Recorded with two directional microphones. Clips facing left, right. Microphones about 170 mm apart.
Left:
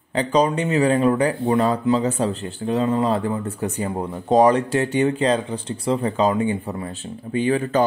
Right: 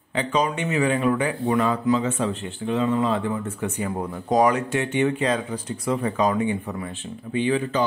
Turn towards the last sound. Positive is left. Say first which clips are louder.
# left 3 dB
turn(degrees=45)  # may be behind; listen again after turning